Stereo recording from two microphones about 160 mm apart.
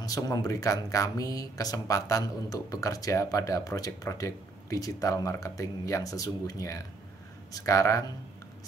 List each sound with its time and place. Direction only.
0.0 s speech: 25° left (ahead or behind)